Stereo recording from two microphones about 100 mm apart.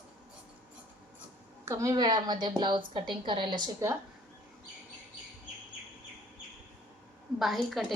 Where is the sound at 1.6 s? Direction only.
30° right (ahead or behind); by 3.6 s 50° right (ahead or behind).